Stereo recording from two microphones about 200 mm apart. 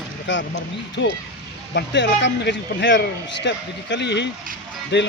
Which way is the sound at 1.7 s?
60° left (ahead or behind).